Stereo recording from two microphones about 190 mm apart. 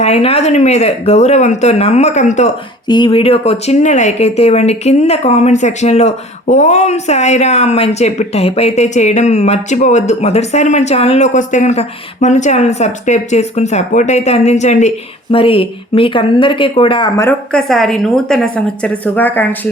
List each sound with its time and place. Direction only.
0.0 s speech: 30° left (ahead or behind)
2.8 s speech: 25° left (ahead or behind)
17.2 s a woman's voice: 10° left (ahead or behind)